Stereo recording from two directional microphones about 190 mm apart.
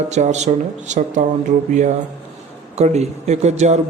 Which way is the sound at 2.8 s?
35° right (ahead or behind).